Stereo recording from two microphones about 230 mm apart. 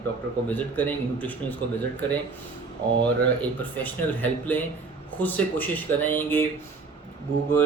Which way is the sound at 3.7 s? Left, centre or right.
Centre.